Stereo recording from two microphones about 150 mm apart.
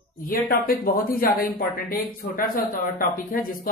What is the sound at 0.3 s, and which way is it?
Speech, 80° left.